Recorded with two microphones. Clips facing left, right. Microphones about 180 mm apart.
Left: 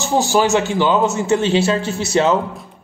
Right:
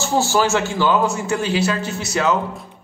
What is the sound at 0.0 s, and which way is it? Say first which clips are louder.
A man's voice: left 2 dB; 15° left (ahead or behind).